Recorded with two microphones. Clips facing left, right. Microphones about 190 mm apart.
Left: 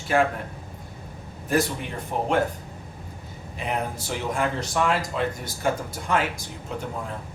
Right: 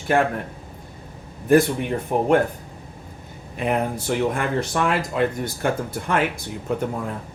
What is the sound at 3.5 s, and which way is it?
Speech, 55° right (ahead or behind).